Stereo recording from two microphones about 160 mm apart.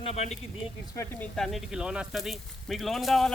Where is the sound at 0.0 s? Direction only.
40° left (ahead or behind).